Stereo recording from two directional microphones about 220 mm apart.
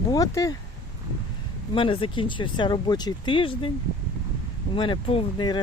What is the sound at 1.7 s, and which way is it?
Speech, 25° left (ahead or behind).